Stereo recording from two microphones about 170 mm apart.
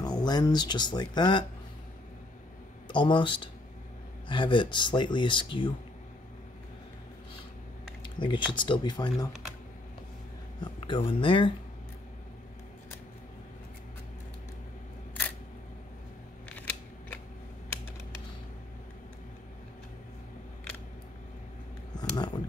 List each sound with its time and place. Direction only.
0.0 s speech: 25° left (ahead or behind)
2.9 s speech: 30° left (ahead or behind)
8.0 s speech: 30° left (ahead or behind)
10.6 s speech: 30° left (ahead or behind)
16.5 s scissors: 10° left (ahead or behind)
21.9 s a sound: 25° left (ahead or behind)